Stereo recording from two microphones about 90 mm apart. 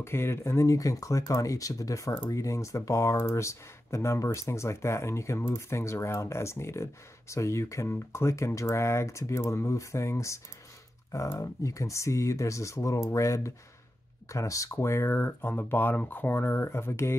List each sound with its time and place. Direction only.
0.0 s speech: 30° left (ahead or behind)